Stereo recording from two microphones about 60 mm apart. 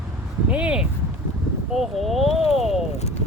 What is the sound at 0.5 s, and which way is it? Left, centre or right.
Speech, centre.